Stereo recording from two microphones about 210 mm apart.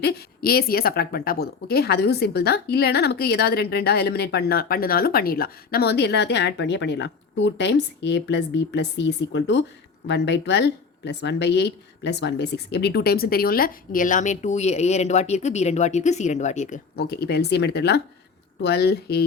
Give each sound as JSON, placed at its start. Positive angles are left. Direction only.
{"t": 0.0, "sound": "speech", "side_deg": 50}